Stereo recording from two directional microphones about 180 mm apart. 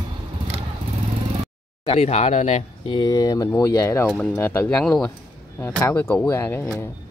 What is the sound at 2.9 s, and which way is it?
Speech, 25° left (ahead or behind).